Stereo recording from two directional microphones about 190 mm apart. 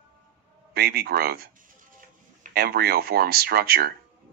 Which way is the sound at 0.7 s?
55° right (ahead or behind).